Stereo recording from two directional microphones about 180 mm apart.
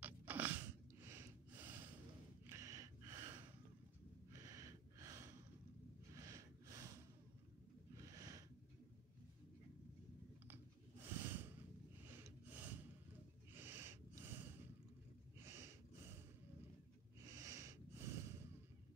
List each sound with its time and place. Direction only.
0.0 s a sound: 10° right (ahead or behind)
2.4 s gasp: 15° right (ahead or behind)
4.3 s a sound: 20° right (ahead or behind)
6.1 s snort: 15° right (ahead or behind)
7.9 s snort: 20° right (ahead or behind)
10.5 s snort: 10° right (ahead or behind)
17.2 s snort: 15° right (ahead or behind)